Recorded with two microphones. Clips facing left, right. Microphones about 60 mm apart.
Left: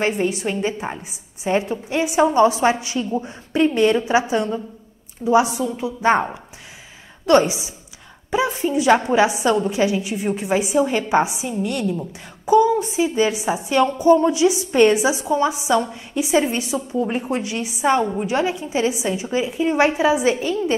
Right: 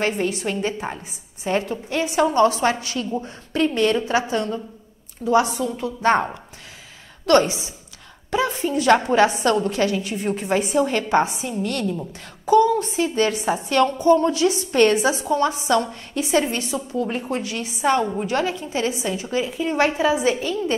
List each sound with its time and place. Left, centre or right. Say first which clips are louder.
0.1 s a woman's voice: left 2 dB; centre